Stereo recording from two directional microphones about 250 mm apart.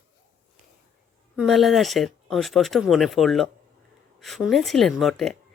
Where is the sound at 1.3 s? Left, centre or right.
Centre.